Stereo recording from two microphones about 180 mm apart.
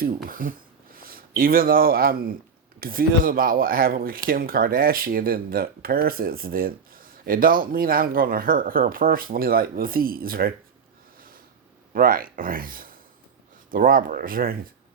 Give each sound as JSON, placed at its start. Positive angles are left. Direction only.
{"t": 0.0, "sound": "speech", "side_deg": -50}
{"t": 11.9, "sound": "speech", "side_deg": -50}